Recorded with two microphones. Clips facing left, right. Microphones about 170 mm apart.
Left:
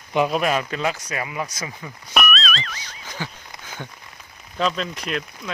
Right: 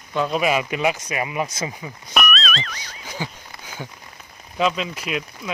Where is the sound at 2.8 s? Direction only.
10° right (ahead or behind).